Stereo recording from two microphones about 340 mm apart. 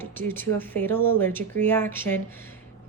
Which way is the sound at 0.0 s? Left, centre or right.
Centre.